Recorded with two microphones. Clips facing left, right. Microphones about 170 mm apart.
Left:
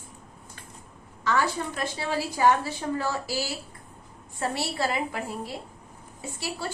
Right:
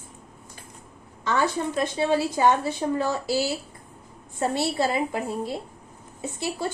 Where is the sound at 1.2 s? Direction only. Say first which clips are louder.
Right 2 dB; 20° right (ahead or behind).